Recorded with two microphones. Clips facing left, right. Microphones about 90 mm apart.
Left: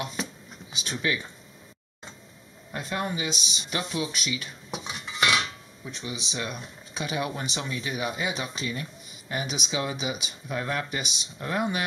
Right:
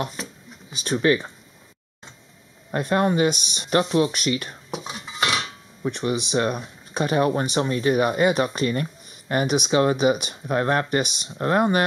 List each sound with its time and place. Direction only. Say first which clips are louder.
0.7 s speech: right 9 dB; 40° right (ahead or behind)
2.7 s speech: right 10 dB; 50° right (ahead or behind)
4.8 s dishes: even; 35° right (ahead or behind)
5.9 s speech: right 12 dB; 60° right (ahead or behind)